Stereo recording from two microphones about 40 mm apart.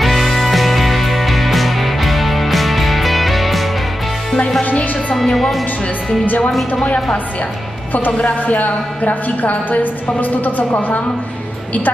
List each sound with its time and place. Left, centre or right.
0.0 s music: centre
5.1 s speech: centre
6.8 s a woman's voice: left
8.2 s a woman's voice: left